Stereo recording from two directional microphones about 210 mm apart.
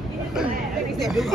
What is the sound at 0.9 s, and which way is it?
Speech, centre (ahead or behind).